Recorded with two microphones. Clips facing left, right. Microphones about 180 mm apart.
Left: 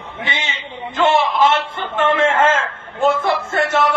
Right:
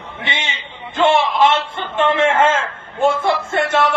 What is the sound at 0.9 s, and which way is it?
Speech, 25° right (ahead or behind).